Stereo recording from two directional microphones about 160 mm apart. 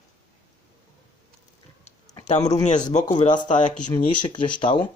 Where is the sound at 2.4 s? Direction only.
25° left (ahead or behind).